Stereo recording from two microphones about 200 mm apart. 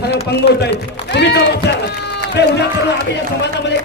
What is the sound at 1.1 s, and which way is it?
A man's voice, 55° left (ahead or behind).